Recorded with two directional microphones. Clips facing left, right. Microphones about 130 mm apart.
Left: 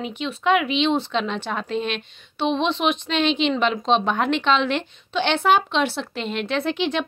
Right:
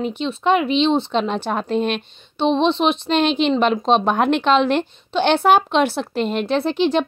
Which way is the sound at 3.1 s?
45° right (ahead or behind).